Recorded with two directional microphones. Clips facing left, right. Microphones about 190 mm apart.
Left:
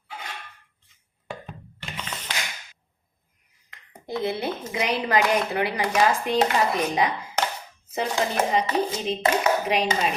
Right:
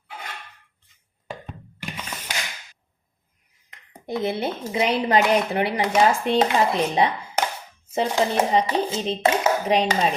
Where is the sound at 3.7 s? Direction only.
25° right (ahead or behind).